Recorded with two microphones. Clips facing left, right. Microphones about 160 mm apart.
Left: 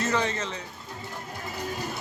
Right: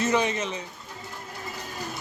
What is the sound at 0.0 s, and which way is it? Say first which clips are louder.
Speech: right 3 dB; 15° right (ahead or behind).